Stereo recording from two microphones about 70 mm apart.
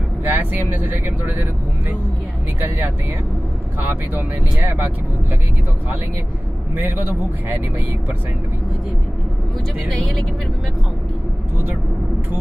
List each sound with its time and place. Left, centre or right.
0.3 s speech: right
3.8 s speech: right
6.7 s a man's voice: right
9.8 s speech: centre